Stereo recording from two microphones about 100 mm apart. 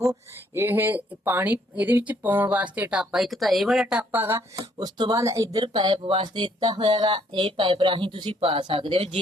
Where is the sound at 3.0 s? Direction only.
5° right (ahead or behind).